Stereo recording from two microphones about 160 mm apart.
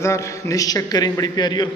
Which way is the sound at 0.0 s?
20° left (ahead or behind).